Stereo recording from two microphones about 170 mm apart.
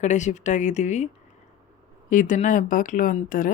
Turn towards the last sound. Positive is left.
turn(degrees=55)  # may be behind; listen again after turning